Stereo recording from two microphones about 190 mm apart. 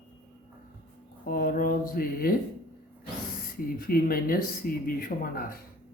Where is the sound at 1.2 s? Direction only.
50° left (ahead or behind).